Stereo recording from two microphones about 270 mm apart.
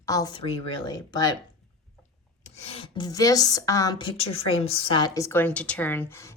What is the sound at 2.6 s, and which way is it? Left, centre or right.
Speech, left.